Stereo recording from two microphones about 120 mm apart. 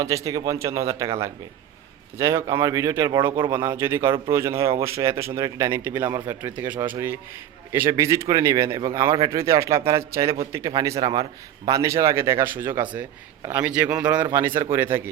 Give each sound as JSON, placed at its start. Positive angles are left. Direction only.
{"t": 0.0, "sound": "speech", "side_deg": -25}